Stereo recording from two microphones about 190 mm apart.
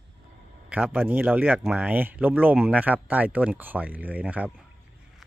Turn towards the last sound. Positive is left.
turn(degrees=-5)  # may be behind; listen again after turning